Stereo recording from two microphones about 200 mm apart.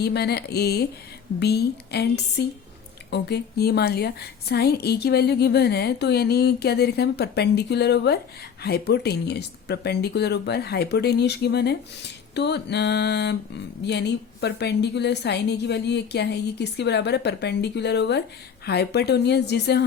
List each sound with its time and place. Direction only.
0.0 s a woman's voice: 55° left (ahead or behind)